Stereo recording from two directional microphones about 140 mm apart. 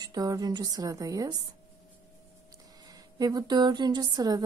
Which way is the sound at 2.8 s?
25° right (ahead or behind).